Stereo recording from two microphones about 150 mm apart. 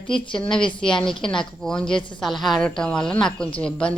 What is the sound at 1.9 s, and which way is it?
Speech, 30° left (ahead or behind).